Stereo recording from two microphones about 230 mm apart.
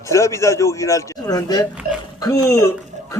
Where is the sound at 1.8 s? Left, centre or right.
Right.